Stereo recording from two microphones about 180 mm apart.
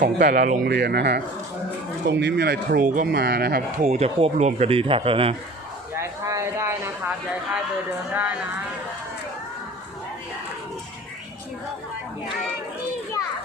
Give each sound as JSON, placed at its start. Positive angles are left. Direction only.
{"t": 0.2, "sound": "speech", "side_deg": -45}
{"t": 0.7, "sound": "speech", "side_deg": -65}
{"t": 2.0, "sound": "speech", "side_deg": -75}
{"t": 2.8, "sound": "speech", "side_deg": -50}
{"t": 3.8, "sound": "speech", "side_deg": -35}
{"t": 6.0, "sound": "a sound", "side_deg": -15}
{"t": 8.1, "sound": "a sound", "side_deg": -10}